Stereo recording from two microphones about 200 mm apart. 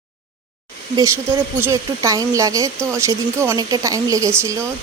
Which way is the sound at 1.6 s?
15° right (ahead or behind).